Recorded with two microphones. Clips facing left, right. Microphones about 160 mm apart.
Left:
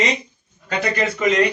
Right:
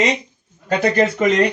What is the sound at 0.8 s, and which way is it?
Speech, 40° right (ahead or behind).